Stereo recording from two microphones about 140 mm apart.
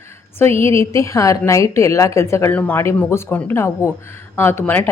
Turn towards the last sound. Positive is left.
turn(degrees=15)  # may be behind; listen again after turning